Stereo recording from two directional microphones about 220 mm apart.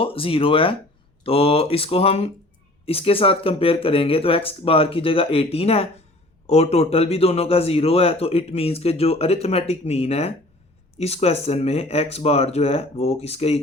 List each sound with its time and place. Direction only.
0.0 s a man's voice: 25° left (ahead or behind)